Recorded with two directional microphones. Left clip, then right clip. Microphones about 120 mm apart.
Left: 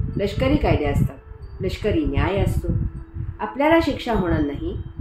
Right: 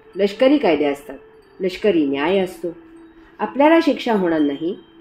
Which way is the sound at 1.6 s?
90° right.